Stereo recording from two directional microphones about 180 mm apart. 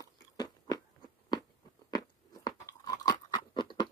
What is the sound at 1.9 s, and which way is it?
Crunch, 20° left (ahead or behind).